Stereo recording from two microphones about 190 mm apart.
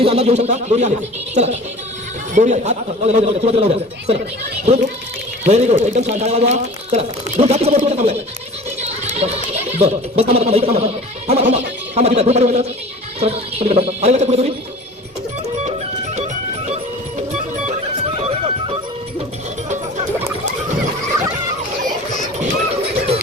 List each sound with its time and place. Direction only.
0.0 s speech: 35° right (ahead or behind)
5.5 s speech: 35° right (ahead or behind)
16.1 s music: 35° right (ahead or behind)
18.2 s music: 30° right (ahead or behind)
22.4 s music: 30° right (ahead or behind)